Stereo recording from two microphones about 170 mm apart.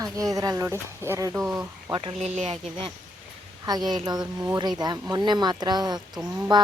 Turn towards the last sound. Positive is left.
turn(degrees=-25)  # may be behind; listen again after turning